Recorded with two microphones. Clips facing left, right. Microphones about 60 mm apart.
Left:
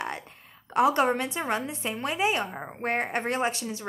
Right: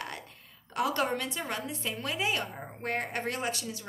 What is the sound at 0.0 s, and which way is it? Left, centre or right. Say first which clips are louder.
A woman's voice: left 6 dB; left.